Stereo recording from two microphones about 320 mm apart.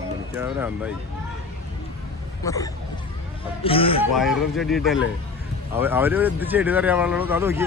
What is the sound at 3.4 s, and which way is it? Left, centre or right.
Vehicle, centre.